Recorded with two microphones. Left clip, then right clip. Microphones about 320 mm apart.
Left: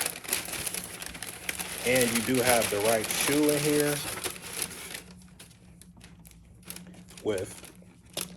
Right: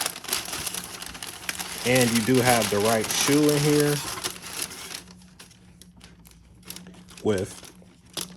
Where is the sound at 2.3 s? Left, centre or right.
Right.